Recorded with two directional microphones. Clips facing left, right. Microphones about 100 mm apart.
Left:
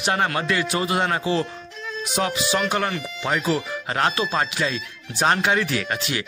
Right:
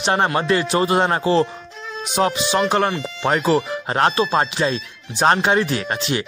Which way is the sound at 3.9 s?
30° right (ahead or behind).